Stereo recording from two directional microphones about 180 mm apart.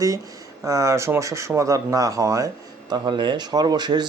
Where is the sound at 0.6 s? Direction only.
15° right (ahead or behind).